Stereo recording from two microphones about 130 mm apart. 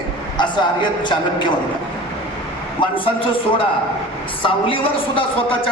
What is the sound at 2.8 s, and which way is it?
Speech, 40° left (ahead or behind).